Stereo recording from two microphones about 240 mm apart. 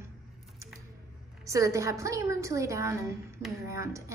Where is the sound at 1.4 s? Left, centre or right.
Centre.